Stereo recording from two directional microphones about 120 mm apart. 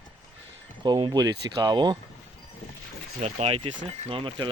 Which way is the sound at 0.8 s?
35° right (ahead or behind).